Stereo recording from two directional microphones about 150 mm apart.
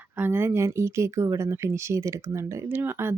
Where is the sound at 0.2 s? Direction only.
15° right (ahead or behind).